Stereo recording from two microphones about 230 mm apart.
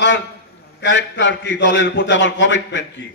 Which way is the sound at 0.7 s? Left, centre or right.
Left.